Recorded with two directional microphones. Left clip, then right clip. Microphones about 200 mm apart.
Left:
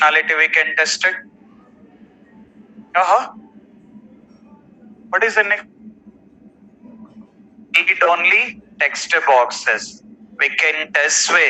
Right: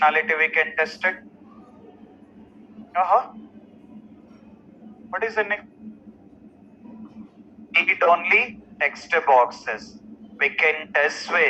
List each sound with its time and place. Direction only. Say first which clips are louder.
0.0 s speech: left 5 dB; 45° left (ahead or behind)
2.9 s speech: left 5 dB; 45° left (ahead or behind)
5.1 s speech: left 9 dB; 45° left (ahead or behind)
7.7 s speech: left 4 dB; 45° left (ahead or behind)